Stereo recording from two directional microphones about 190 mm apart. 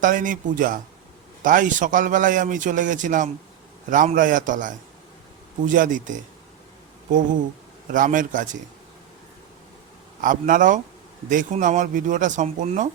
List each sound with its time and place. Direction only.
0.0 s a man's voice: 45° right (ahead or behind)
10.2 s a man's voice: 45° right (ahead or behind)